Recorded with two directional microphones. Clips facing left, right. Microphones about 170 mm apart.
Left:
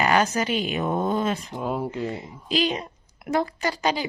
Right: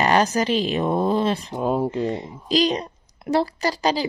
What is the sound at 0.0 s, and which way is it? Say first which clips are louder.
A woman's voice: right 3 dB; 35° right (ahead or behind).